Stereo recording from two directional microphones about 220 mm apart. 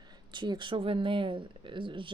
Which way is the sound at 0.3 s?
20° right (ahead or behind).